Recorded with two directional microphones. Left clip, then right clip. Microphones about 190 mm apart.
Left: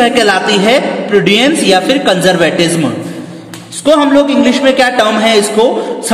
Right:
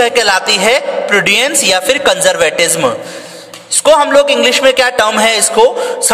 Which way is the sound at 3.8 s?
45° right (ahead or behind).